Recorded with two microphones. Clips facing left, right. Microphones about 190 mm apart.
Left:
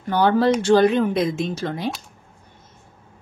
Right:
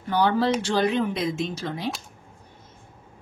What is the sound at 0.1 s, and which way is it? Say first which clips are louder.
Speech: left 4 dB; 50° left (ahead or behind).